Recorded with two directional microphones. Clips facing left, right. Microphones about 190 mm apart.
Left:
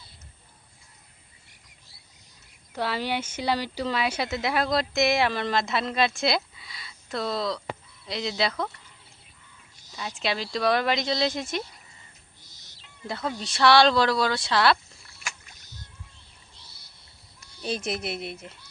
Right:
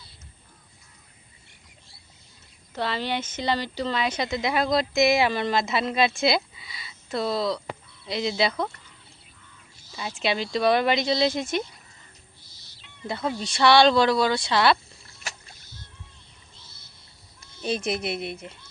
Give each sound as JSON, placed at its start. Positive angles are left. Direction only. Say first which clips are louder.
{"t": 2.7, "sound": "speech", "louder": "even", "side_deg": 10}
{"t": 10.2, "sound": "speech", "louder": "right 3 dB", "side_deg": 0}
{"t": 13.1, "sound": "speech", "louder": "right 3 dB", "side_deg": 0}
{"t": 15.0, "sound": "rowboat", "louder": "right 1 dB", "side_deg": -35}
{"t": 17.7, "sound": "speech", "louder": "right 3 dB", "side_deg": 0}